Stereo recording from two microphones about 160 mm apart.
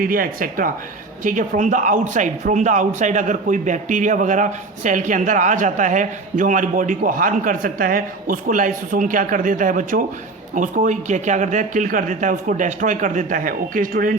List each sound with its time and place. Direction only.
0.0 s a man's voice: 60° right (ahead or behind)